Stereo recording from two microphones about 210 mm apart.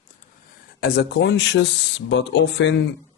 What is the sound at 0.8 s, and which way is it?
Speech, 50° left (ahead or behind).